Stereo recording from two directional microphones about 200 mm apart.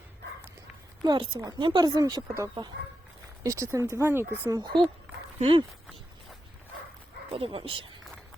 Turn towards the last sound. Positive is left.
turn(degrees=-25)  # may be behind; listen again after turning